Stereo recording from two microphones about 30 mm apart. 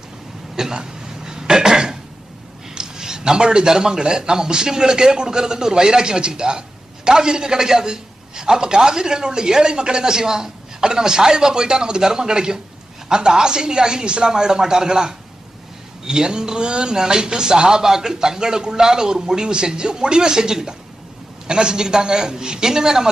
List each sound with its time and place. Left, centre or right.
0.5 s cough: right
2.7 s a man's voice: right
16.9 s a man's voice: right